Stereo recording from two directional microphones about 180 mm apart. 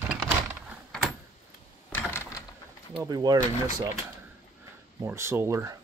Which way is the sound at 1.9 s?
15° left (ahead or behind).